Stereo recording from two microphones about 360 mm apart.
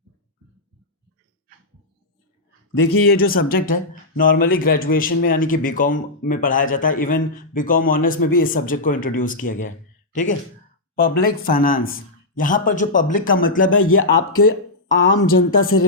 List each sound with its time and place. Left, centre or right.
2.8 s a man's voice: left